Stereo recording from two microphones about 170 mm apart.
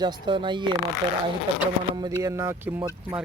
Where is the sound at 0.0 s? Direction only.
25° right (ahead or behind).